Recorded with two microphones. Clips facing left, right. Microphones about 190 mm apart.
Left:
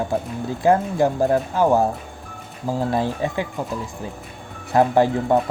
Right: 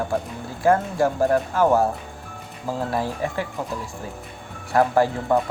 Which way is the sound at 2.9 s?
20° left (ahead or behind).